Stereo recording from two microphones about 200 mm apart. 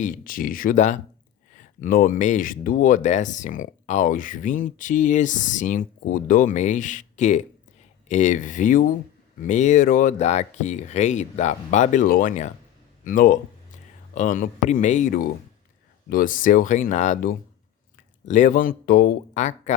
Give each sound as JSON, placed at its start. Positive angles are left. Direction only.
{"t": 0.0, "sound": "speech", "side_deg": 45}